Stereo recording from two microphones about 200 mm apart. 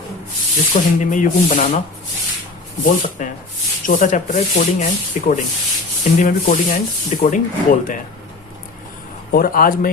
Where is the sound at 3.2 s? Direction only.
40° left (ahead or behind).